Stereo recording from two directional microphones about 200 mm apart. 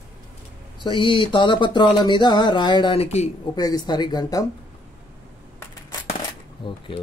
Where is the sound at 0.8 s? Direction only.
25° left (ahead or behind).